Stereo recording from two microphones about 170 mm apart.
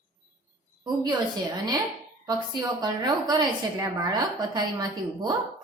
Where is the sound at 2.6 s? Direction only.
25° right (ahead or behind).